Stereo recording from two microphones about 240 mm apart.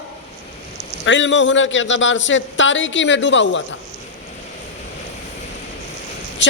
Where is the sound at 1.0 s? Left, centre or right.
Left.